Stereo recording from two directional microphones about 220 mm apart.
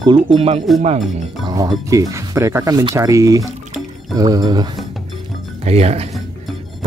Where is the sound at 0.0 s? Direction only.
20° right (ahead or behind).